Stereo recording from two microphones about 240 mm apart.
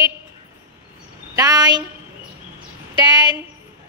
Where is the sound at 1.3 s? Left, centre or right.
Centre.